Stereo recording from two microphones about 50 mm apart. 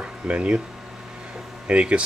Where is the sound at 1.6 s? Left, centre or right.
Right.